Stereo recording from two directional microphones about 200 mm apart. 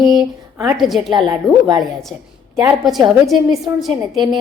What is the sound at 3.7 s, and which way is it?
Speech, 15° right (ahead or behind).